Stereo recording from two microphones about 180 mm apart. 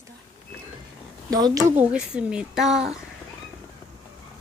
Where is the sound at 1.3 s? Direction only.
20° right (ahead or behind).